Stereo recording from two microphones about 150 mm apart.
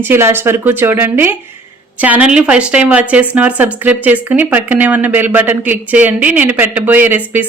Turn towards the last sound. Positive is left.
turn(degrees=-10)  # may be behind; listen again after turning